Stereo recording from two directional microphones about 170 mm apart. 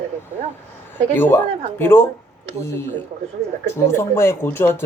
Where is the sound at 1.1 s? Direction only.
10° left (ahead or behind).